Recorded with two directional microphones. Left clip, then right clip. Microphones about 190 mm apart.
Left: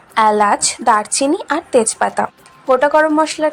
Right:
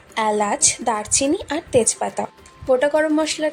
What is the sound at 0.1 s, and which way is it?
A woman's voice, 5° left (ahead or behind).